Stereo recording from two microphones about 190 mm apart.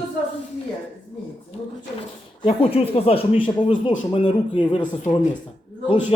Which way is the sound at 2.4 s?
30° left (ahead or behind).